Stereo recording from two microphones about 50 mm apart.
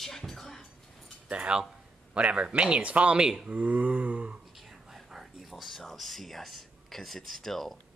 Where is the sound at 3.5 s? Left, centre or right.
Right.